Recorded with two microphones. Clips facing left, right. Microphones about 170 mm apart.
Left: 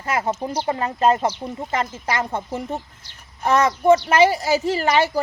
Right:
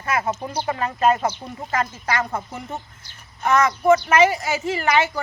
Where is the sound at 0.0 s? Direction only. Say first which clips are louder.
Left 1 dB; 30° left (ahead or behind).